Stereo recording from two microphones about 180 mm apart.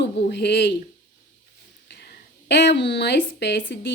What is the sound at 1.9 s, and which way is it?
A woman's voice, 70° left (ahead or behind).